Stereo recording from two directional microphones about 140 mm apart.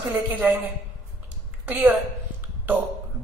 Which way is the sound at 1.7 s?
10° right (ahead or behind).